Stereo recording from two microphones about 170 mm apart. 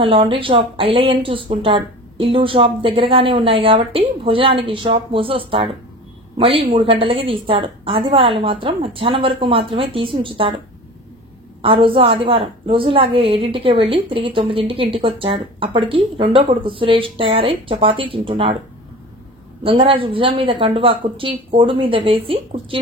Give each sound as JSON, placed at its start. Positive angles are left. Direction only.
{"t": 0.0, "sound": "a woman's voice", "side_deg": -30}
{"t": 11.6, "sound": "a woman's voice", "side_deg": -30}
{"t": 19.6, "sound": "a woman's voice", "side_deg": -30}